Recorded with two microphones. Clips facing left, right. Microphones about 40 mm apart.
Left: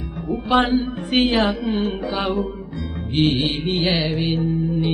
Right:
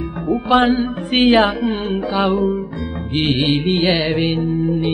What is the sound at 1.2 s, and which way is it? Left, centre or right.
Music, right.